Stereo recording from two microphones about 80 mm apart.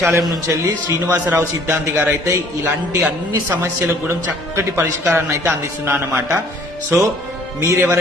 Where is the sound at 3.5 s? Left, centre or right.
Right.